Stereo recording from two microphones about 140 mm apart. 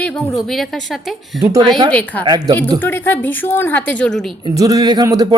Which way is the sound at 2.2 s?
30° right (ahead or behind).